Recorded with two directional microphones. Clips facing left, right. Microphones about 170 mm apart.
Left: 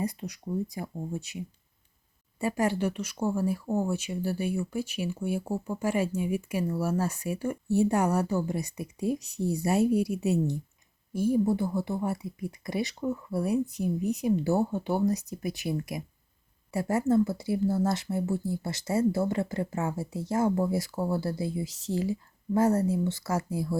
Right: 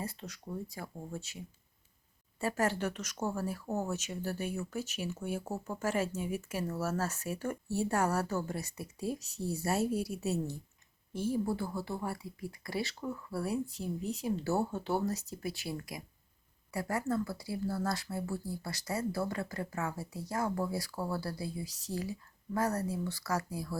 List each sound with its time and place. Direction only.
0.0 s speech: 15° left (ahead or behind)
2.4 s speech: 15° left (ahead or behind)